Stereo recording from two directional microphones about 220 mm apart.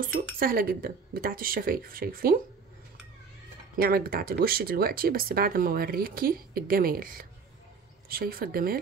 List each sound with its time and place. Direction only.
0.0 s speech: 40° right (ahead or behind)
3.7 s speech: 45° right (ahead or behind)